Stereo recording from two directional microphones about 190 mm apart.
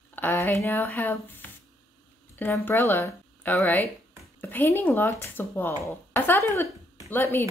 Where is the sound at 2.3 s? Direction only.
10° left (ahead or behind).